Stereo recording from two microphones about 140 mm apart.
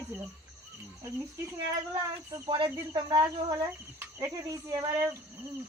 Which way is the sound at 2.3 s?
35° right (ahead or behind).